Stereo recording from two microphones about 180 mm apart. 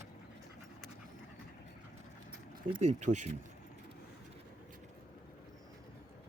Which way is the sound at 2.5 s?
30° right (ahead or behind).